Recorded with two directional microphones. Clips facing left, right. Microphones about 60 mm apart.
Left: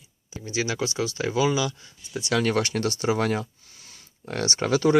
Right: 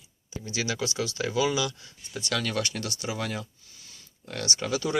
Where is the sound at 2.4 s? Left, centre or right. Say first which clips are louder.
Left 10 dB; left.